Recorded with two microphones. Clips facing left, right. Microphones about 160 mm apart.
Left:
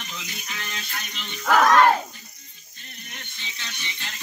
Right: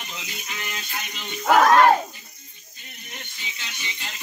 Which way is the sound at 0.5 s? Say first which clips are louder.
Right 2 dB; 15° right (ahead or behind).